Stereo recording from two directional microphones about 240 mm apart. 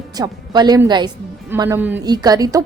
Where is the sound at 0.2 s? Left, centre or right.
Centre.